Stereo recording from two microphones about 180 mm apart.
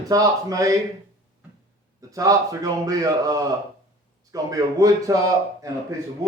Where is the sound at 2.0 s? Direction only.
20° right (ahead or behind).